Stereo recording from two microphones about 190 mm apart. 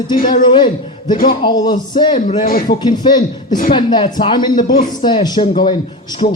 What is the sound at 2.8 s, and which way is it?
Speech, 25° left (ahead or behind).